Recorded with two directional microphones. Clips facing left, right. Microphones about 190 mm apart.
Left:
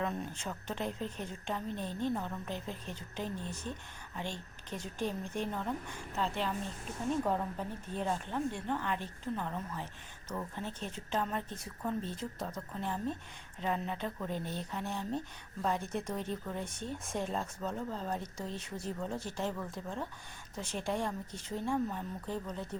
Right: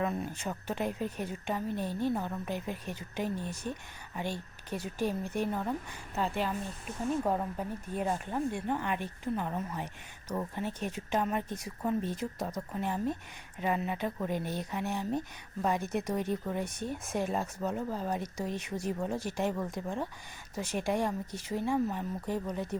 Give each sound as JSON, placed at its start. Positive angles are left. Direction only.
{"t": 0.0, "sound": "a woman's voice", "side_deg": -5}